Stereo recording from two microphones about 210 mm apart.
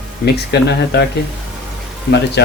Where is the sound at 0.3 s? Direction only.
50° left (ahead or behind).